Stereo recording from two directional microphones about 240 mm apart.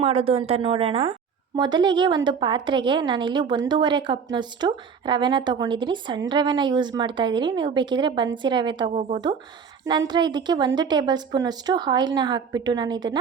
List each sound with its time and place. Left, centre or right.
0.0 s a woman's voice: right
9.8 s a woman's voice: centre